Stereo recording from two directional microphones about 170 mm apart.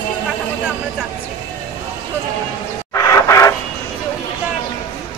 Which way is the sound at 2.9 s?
15° left (ahead or behind).